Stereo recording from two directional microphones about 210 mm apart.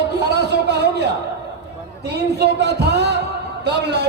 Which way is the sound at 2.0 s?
55° right (ahead or behind).